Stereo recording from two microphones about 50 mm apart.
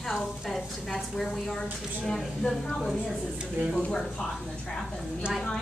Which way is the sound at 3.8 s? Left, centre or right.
Left.